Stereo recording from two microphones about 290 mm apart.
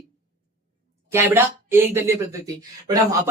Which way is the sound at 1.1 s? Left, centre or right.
Centre.